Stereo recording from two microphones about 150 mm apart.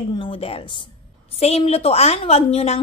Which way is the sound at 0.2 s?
40° left (ahead or behind).